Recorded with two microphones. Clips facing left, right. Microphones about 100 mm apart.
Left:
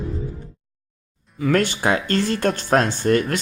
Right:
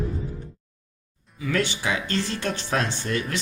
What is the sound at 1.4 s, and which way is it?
Speech, 50° left (ahead or behind).